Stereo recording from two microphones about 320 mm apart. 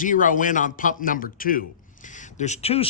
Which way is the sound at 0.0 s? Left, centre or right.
Left.